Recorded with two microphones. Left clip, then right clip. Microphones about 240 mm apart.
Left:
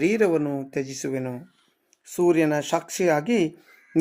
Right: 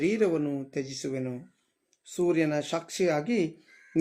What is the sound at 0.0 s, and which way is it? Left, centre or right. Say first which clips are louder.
Speech: left 5 dB; centre.